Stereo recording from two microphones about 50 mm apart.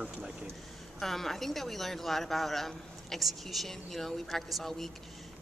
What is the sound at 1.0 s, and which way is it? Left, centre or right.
Speech, centre.